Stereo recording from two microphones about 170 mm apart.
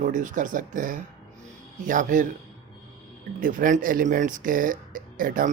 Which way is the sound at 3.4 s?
55° right (ahead or behind).